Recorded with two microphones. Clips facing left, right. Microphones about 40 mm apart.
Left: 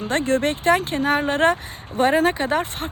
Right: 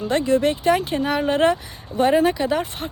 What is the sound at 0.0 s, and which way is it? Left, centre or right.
Speech, left.